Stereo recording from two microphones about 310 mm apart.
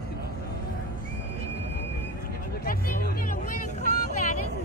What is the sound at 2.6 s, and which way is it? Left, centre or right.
Music, left.